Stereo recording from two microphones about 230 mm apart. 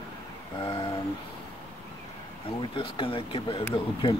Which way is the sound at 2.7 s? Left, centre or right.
Left.